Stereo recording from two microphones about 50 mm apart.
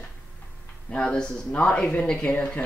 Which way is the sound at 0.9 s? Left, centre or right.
Centre.